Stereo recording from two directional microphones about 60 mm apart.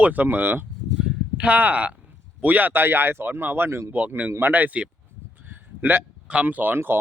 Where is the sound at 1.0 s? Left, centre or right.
Centre.